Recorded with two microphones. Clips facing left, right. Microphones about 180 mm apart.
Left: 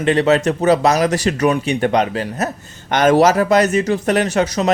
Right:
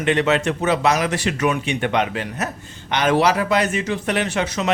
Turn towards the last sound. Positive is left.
turn(degrees=40)  # may be behind; listen again after turning